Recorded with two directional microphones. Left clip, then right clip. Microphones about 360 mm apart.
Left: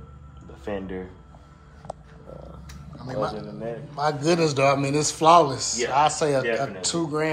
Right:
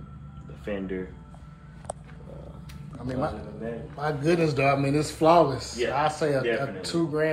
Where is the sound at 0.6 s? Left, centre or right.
Left.